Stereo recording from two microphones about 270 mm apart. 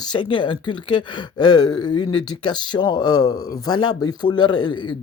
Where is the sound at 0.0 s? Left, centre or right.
Centre.